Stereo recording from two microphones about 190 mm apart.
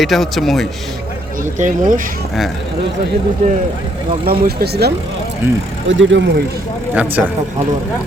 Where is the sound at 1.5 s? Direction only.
40° right (ahead or behind).